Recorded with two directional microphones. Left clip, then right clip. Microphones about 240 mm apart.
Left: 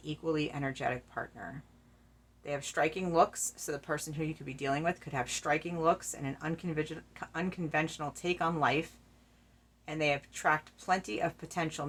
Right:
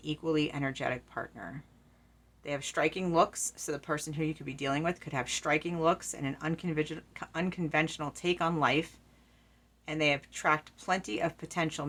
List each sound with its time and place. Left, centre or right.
0.0 s speech: right